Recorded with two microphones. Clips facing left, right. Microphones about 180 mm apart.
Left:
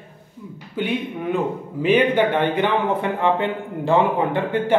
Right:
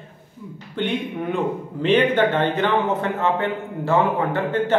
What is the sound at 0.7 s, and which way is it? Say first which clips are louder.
A man's voice: even; 5° left (ahead or behind).